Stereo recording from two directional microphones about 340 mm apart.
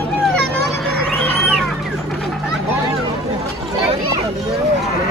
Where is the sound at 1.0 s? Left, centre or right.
Centre.